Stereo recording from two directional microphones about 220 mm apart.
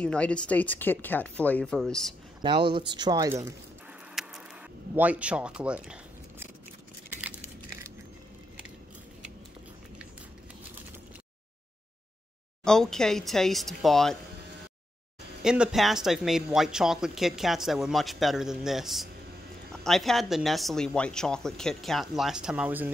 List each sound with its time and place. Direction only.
0.0 s speech: 5° left (ahead or behind)
2.4 s speech: 20° right (ahead or behind)
4.1 s a sound: centre (ahead or behind)
4.9 s speech: 5° right (ahead or behind)
7.1 s a sound: 5° right (ahead or behind)
12.6 s speech: 5° left (ahead or behind)
15.4 s speech: 5° right (ahead or behind)